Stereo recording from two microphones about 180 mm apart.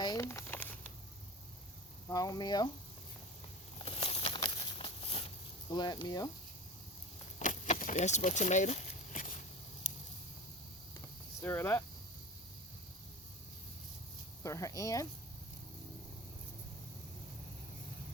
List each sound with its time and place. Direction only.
0.0 s a sound: 20° left (ahead or behind)
2.0 s speech: 20° left (ahead or behind)
3.8 s a sound: 35° left (ahead or behind)
5.7 s speech: 25° left (ahead or behind)
7.3 s keys jangling: 40° left (ahead or behind)
11.4 s speech: 10° left (ahead or behind)
14.4 s speech: 20° left (ahead or behind)